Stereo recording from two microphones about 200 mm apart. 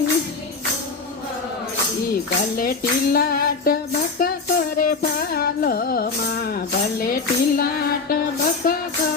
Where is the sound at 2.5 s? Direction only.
50° left (ahead or behind).